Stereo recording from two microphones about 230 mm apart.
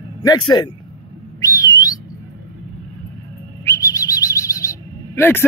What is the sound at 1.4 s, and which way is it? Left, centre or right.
Whistle, centre.